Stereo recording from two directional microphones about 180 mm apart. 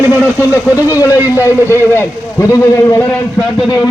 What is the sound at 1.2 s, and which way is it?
A man's voice, 15° left (ahead or behind).